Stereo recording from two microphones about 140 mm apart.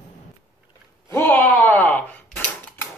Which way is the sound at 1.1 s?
15° left (ahead or behind).